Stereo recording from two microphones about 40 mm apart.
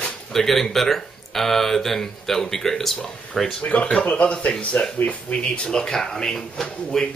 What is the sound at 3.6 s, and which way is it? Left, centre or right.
Speech, left.